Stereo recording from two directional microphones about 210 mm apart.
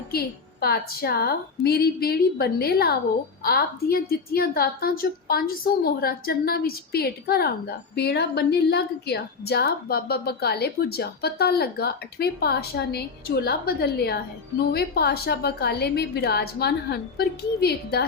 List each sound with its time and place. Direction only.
0.1 s a woman's voice: 50° left (ahead or behind)